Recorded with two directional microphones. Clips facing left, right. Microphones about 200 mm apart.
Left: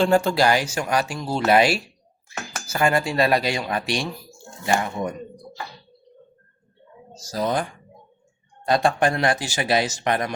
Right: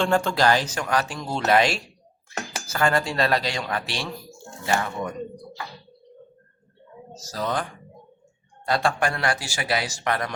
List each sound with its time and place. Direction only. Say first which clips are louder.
0.0 s speech: left 3 dB; 5° left (ahead or behind)
7.1 s speech: left 4 dB; 15° left (ahead or behind)